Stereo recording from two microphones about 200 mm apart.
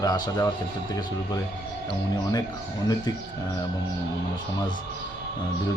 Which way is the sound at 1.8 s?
20° left (ahead or behind).